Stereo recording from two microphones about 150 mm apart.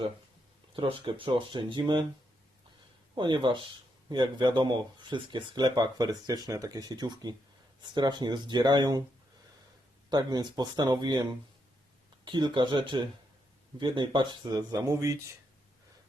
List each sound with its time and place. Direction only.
0.8 s speech: 35° right (ahead or behind)
3.2 s speech: 30° right (ahead or behind)
10.1 s speech: 25° right (ahead or behind)